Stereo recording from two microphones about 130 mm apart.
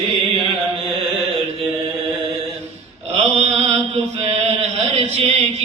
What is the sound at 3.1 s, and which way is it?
Mantra, 55° right (ahead or behind).